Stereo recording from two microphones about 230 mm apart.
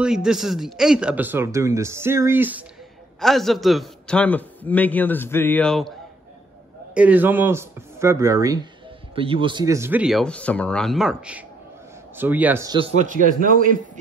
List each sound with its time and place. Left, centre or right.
0.0 s a man's voice: centre; by 13.7 s right